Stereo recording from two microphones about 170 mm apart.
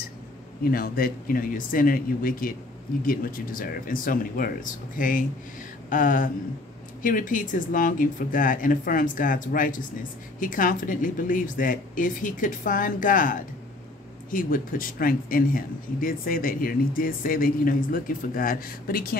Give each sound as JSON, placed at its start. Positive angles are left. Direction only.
{"t": 0.7, "sound": "speech", "side_deg": 60}